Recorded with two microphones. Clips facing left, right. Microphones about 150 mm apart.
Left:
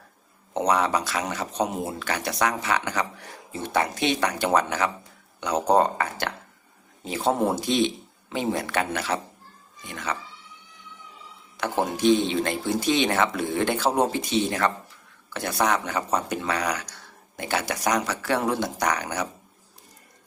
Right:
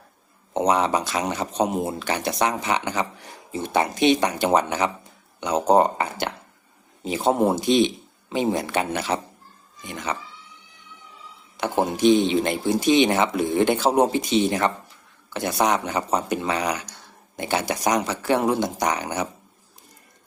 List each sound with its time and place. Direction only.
0.5 s speech: 20° right (ahead or behind)
11.5 s speech: 20° right (ahead or behind)